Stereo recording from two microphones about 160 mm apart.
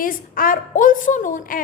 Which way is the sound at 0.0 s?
60° left (ahead or behind).